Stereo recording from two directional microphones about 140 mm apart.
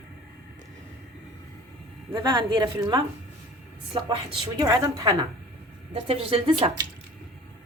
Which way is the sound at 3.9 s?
35° right (ahead or behind).